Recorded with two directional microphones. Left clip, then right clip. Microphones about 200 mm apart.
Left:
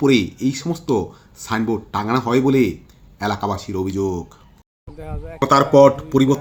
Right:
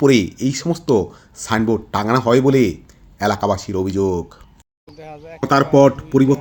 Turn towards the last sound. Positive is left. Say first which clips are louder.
# even
turn(degrees=-10)  # may be behind; listen again after turning